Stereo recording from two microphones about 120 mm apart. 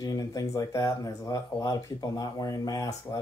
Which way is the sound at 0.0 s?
30° left (ahead or behind).